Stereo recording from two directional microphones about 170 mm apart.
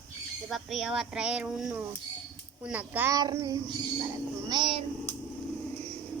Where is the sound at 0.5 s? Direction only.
Centre (ahead or behind); by 4.9 s 30° right (ahead or behind).